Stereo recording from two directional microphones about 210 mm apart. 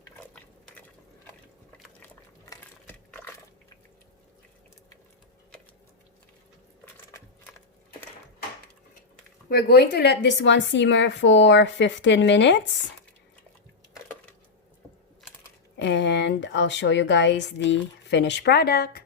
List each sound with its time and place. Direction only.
2.5 s a sound: 10° left (ahead or behind)
9.5 s a woman's voice: 45° left (ahead or behind)
15.8 s a woman's voice: 55° left (ahead or behind)